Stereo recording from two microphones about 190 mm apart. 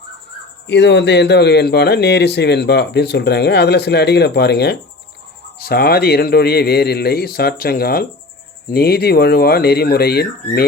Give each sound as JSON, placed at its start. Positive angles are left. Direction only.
{"t": 0.7, "sound": "a man's voice", "side_deg": 65}